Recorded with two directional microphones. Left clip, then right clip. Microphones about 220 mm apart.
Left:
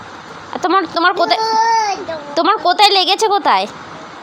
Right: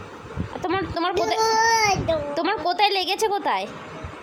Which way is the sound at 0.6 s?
10° left (ahead or behind).